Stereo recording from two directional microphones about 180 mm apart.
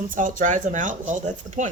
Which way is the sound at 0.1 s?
45° right (ahead or behind).